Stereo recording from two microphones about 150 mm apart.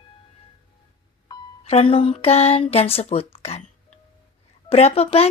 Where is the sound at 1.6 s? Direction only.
40° left (ahead or behind).